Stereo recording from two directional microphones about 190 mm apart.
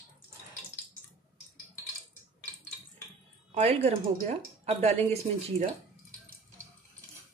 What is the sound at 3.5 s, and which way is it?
Speech, 35° right (ahead or behind).